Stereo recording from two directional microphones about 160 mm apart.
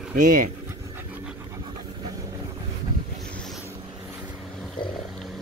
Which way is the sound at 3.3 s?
Centre (ahead or behind).